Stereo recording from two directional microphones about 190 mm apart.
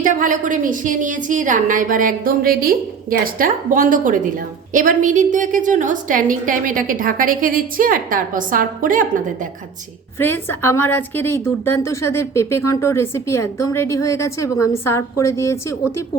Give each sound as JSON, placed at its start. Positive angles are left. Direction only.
{"t": 0.0, "sound": "a woman's voice", "side_deg": -45}
{"t": 10.2, "sound": "speech", "side_deg": 10}